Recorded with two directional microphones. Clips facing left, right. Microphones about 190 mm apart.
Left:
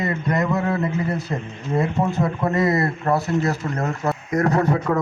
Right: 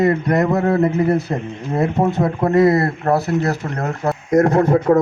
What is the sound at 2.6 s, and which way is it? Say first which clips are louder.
Speech: right 4 dB; 35° right (ahead or behind).